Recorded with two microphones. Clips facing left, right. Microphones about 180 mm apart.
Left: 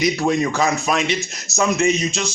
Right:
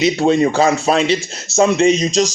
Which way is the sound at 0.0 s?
25° right (ahead or behind).